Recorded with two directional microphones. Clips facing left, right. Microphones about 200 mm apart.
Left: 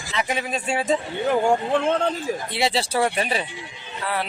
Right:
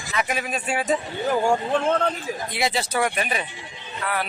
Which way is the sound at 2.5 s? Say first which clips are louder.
Left 1 dB; 30° left (ahead or behind).